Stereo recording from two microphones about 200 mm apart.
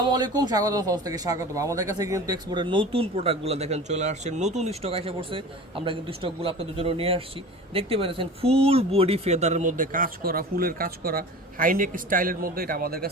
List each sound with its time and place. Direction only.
0.1 s speech: 20° right (ahead or behind); by 13.1 s 50° right (ahead or behind)